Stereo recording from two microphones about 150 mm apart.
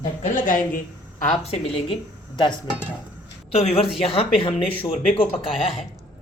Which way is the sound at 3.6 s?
40° left (ahead or behind).